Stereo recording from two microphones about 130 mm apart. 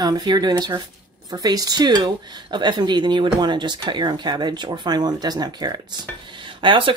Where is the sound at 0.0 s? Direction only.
30° right (ahead or behind).